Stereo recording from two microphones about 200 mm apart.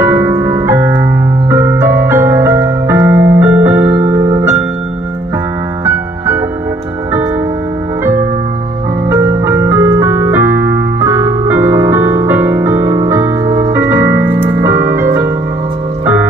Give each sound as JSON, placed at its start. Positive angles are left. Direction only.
{"t": 0.0, "sound": "music", "side_deg": -10}
{"t": 8.0, "sound": "music", "side_deg": -10}
{"t": 9.2, "sound": "keyboard", "side_deg": -15}